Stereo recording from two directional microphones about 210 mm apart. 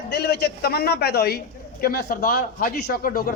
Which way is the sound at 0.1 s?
50° left (ahead or behind).